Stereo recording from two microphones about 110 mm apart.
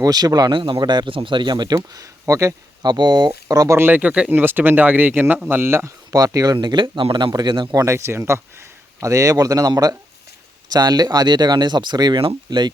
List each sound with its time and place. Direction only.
0.0 s speech: 35° right (ahead or behind)
2.8 s speech: 40° right (ahead or behind)
7.7 s speech: 30° right (ahead or behind)